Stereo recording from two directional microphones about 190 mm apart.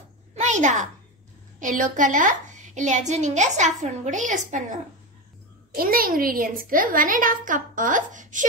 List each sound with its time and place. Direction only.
0.3 s a sound: 40° right (ahead or behind)
1.6 s a woman's voice: 40° right (ahead or behind)
5.8 s a woman's voice: 50° right (ahead or behind)